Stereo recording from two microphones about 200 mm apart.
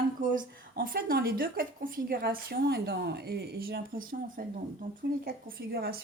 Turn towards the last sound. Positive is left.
turn(degrees=-50)  # may be behind; listen again after turning